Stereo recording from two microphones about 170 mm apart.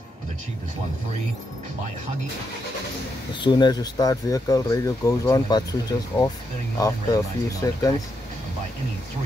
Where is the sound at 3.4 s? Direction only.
25° left (ahead or behind).